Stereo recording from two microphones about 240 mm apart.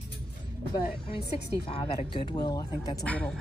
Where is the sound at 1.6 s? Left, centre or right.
Left.